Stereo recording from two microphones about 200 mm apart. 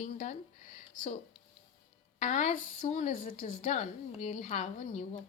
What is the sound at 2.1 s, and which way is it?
A woman's voice, 35° left (ahead or behind).